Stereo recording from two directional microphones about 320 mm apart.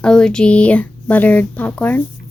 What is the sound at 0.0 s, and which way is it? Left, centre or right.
Speech, centre.